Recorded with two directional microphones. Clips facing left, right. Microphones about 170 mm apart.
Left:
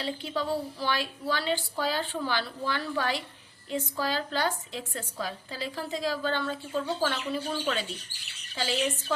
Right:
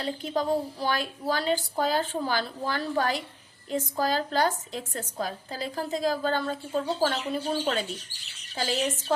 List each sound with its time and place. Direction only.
0.0 s a woman's voice: 40° right (ahead or behind)